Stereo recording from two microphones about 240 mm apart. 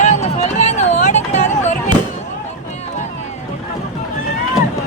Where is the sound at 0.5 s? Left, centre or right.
Left.